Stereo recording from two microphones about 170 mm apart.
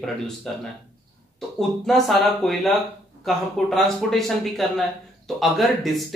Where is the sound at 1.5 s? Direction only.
Centre (ahead or behind).